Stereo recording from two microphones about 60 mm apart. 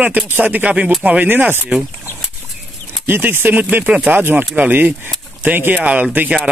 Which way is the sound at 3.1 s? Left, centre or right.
Right.